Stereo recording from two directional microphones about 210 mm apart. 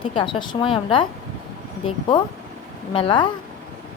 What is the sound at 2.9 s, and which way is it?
Speech, 25° left (ahead or behind).